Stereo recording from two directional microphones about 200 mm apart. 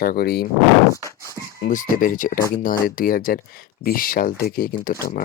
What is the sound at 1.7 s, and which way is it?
Speech, 40° left (ahead or behind).